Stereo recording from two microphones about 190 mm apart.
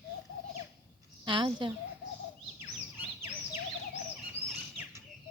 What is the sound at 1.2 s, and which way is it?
Speech, 25° right (ahead or behind).